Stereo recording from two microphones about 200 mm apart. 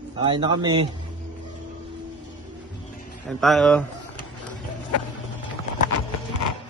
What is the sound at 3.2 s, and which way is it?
Speech, centre (ahead or behind).